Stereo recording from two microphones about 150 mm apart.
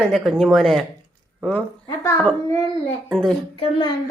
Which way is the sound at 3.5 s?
30° left (ahead or behind).